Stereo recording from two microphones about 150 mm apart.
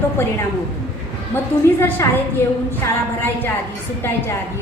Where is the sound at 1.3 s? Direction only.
15° left (ahead or behind).